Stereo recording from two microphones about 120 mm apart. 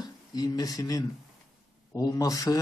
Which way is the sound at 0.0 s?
35° left (ahead or behind).